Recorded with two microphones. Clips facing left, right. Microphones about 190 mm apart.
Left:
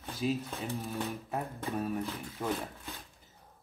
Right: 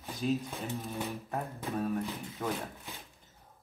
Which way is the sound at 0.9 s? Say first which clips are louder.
Left 1 dB; centre (ahead or behind).